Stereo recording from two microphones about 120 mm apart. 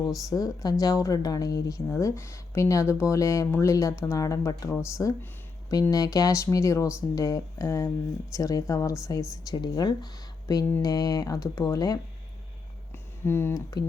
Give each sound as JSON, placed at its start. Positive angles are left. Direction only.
{"t": 0.0, "sound": "speech", "side_deg": 30}
{"t": 13.2, "sound": "speech", "side_deg": 20}